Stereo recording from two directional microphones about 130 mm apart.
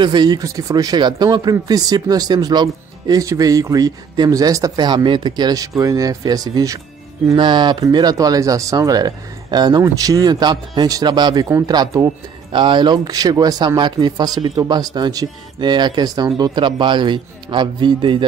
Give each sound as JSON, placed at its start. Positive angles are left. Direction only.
{"t": 0.0, "sound": "speech", "side_deg": -35}